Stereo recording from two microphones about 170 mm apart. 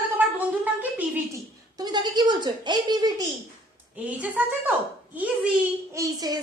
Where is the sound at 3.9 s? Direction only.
10° right (ahead or behind).